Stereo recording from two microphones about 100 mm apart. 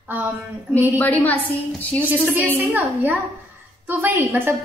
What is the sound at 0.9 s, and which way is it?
A woman's voice, 15° left (ahead or behind).